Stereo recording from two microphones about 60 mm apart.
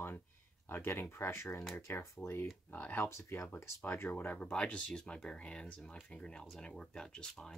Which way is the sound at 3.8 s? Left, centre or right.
Left.